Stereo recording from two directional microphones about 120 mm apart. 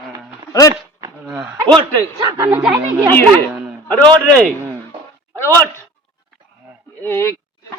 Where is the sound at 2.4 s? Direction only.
10° right (ahead or behind).